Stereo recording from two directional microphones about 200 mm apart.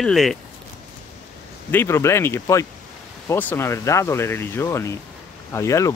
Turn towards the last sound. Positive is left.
turn(degrees=15)  # may be behind; listen again after turning